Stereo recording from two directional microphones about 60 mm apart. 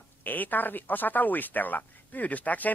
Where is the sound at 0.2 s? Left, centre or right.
Left.